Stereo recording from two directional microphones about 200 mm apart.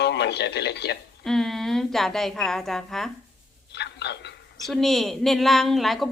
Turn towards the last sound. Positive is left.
turn(degrees=0)  # may be behind; listen again after turning